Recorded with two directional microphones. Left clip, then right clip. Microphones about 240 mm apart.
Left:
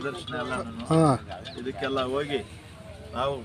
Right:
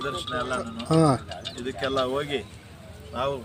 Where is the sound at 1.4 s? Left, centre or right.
Right; by 2.4 s centre.